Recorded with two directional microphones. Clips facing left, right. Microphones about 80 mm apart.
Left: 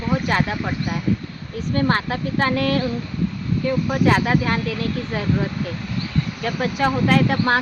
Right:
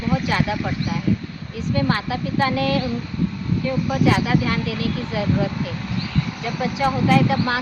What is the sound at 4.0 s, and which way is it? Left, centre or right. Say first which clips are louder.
Speech: left 1 dB; left.